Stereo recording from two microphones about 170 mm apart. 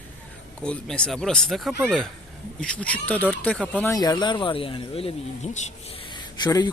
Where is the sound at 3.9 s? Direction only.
20° left (ahead or behind).